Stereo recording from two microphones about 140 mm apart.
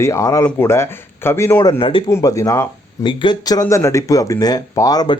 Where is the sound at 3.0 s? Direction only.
35° left (ahead or behind).